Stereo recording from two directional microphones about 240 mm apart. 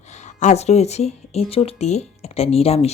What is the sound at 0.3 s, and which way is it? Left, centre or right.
Speech, left.